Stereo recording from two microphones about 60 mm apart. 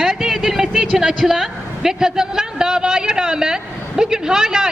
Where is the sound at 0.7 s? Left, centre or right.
Centre.